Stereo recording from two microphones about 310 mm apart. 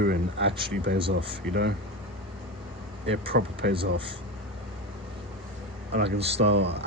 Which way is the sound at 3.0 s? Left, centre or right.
Right.